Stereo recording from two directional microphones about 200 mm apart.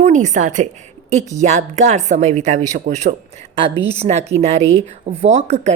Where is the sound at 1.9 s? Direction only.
35° right (ahead or behind).